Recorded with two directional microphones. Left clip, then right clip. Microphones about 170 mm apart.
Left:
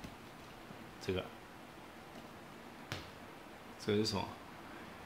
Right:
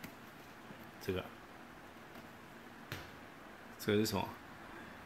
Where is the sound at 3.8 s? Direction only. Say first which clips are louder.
Right 1 dB; 30° right (ahead or behind).